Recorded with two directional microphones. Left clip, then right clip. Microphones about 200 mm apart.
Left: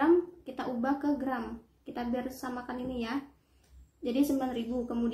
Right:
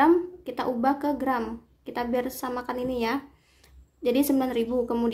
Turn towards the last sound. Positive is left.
turn(degrees=-55)  # may be behind; listen again after turning